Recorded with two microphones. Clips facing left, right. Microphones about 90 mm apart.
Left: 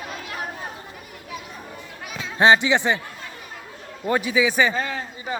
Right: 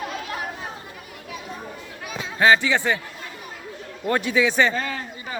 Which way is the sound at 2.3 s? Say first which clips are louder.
Left 1 dB; 25° left (ahead or behind).